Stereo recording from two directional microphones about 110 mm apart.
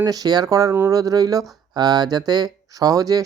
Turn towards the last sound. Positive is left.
turn(degrees=-35)  # may be behind; listen again after turning